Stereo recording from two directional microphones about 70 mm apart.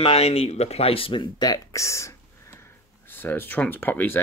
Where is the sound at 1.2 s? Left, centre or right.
Left.